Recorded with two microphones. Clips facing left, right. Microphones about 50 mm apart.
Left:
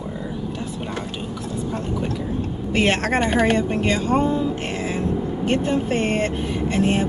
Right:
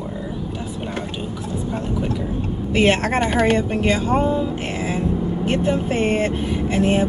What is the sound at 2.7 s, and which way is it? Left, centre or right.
Speech, centre.